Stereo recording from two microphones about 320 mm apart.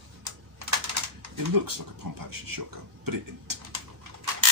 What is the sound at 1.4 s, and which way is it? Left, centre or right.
Speech, right.